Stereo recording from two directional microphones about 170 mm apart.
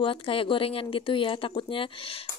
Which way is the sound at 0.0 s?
30° left (ahead or behind).